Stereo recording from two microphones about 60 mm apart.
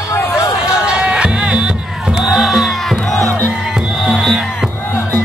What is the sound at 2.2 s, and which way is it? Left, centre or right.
Music, centre.